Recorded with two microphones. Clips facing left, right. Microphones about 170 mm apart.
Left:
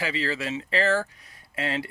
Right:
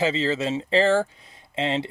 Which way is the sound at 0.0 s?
25° right (ahead or behind).